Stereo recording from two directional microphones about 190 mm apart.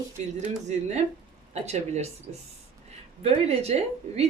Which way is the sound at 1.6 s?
35° right (ahead or behind).